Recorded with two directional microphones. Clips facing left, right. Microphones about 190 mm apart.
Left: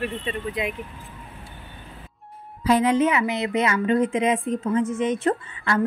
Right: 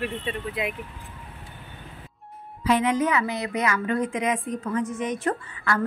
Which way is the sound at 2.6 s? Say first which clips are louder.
Left 3 dB; 35° left (ahead or behind).